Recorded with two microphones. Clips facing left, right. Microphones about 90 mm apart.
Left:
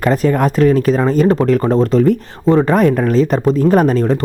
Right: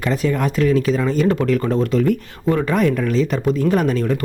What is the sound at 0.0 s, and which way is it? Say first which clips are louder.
Speech: left 6 dB; 45° left (ahead or behind).